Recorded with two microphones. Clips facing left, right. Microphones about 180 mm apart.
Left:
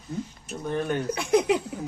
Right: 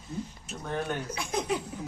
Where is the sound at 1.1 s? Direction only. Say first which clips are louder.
Left 10 dB; 70° left (ahead or behind).